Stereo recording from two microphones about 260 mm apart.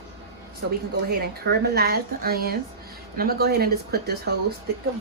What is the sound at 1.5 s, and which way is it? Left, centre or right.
Speech, right.